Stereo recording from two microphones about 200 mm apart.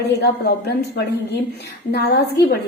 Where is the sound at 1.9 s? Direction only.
50° left (ahead or behind).